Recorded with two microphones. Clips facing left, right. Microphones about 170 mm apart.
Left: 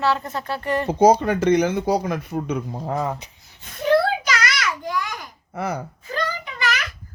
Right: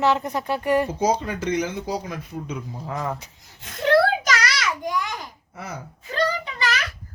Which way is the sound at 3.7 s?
75° right (ahead or behind).